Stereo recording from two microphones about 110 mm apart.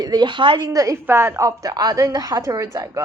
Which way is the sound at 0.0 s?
40° right (ahead or behind).